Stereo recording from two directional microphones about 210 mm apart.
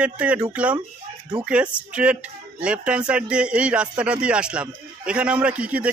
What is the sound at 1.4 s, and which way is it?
Speech, 5° right (ahead or behind).